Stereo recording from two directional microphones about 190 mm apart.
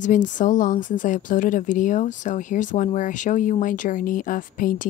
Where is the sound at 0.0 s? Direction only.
40° left (ahead or behind).